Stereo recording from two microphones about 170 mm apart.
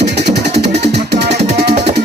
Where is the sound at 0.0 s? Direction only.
75° right (ahead or behind).